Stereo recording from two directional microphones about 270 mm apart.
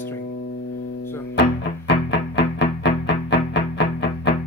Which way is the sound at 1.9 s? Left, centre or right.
Left.